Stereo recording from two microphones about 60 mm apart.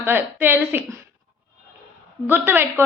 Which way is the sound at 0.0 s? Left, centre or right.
Right.